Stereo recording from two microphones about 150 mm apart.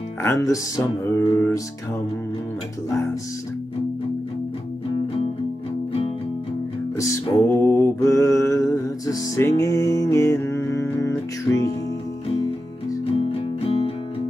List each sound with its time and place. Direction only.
0.2 s speech: 20° left (ahead or behind)
7.0 s music: 20° left (ahead or behind)
13.7 s music: 40° left (ahead or behind)